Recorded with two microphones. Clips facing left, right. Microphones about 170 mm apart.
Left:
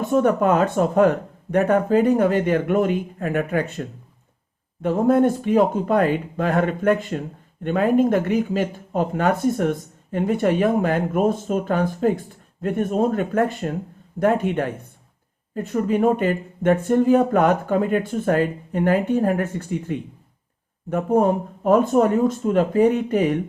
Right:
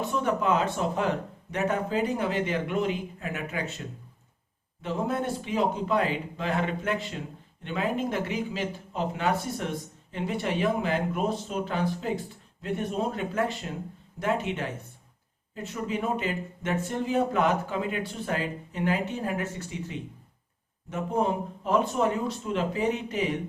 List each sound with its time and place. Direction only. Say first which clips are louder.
0.0 s speech: left 9 dB; 50° left (ahead or behind)